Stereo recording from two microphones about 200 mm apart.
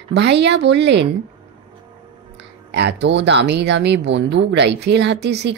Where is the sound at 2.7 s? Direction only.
60° right (ahead or behind).